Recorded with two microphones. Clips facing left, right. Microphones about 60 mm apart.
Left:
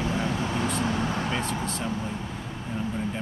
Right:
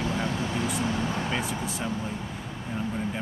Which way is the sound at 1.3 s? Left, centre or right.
Centre.